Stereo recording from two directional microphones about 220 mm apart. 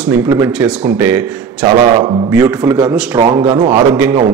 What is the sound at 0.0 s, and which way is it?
Speech, 5° right (ahead or behind).